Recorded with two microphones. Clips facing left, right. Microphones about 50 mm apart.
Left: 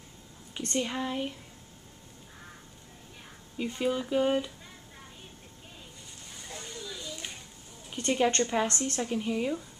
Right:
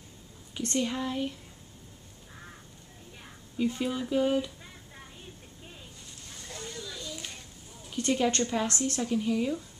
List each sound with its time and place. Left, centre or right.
0.6 s a woman's voice: centre
3.5 s a woman's voice: centre
6.3 s a sound: centre
8.1 s a woman's voice: centre